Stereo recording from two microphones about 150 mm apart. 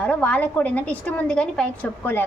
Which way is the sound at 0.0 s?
10° left (ahead or behind).